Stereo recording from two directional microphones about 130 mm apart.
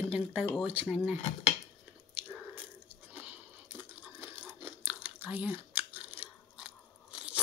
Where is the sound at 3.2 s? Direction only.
15° right (ahead or behind).